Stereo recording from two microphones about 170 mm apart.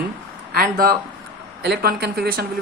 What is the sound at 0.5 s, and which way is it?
Speech, 60° right (ahead or behind).